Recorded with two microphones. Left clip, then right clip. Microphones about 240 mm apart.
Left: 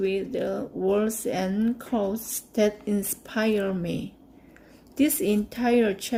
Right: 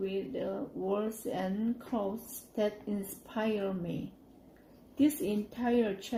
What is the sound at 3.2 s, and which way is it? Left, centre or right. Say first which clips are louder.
Speech: left 8 dB; left.